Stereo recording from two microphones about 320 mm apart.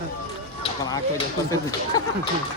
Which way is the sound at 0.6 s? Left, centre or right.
Centre.